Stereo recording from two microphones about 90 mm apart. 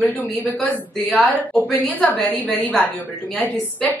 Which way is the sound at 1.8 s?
20° left (ahead or behind).